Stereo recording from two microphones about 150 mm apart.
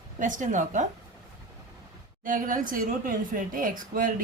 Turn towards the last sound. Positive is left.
turn(degrees=-65)  # may be behind; listen again after turning